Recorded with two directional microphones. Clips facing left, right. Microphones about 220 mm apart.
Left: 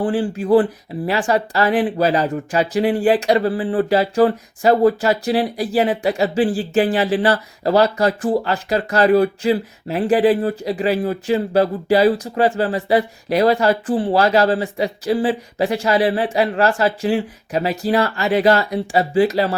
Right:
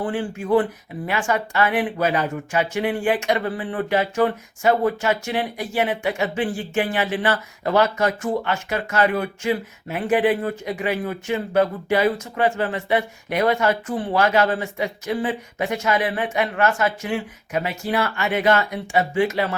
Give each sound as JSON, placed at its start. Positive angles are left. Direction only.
{"t": 0.0, "sound": "a woman's voice", "side_deg": 35}